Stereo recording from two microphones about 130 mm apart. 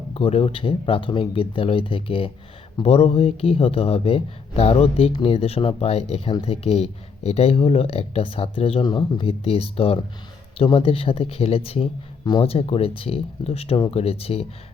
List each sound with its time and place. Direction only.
0.1 s speech: 45° left (ahead or behind)